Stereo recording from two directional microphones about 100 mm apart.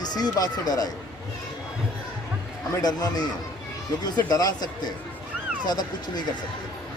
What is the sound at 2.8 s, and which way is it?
Speech, 45° left (ahead or behind).